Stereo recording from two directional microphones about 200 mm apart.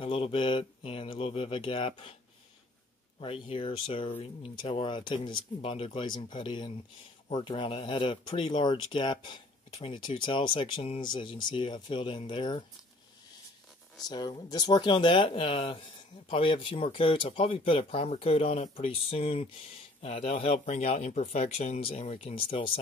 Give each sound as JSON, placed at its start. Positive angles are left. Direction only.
{"t": 0.0, "sound": "speech", "side_deg": 25}
{"t": 3.2, "sound": "speech", "side_deg": 25}
{"t": 14.0, "sound": "speech", "side_deg": 20}